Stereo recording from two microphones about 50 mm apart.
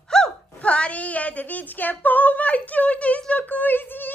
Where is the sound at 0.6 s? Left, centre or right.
Left.